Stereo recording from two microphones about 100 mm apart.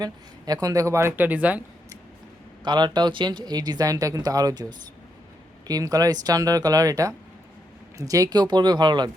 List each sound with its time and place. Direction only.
0.0 s speech: 40° right (ahead or behind); by 1.6 s 15° right (ahead or behind)
2.6 s speech: 45° right (ahead or behind)
5.6 s speech: 40° right (ahead or behind)